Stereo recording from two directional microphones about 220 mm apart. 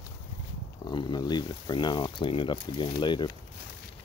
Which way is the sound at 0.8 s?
20° left (ahead or behind).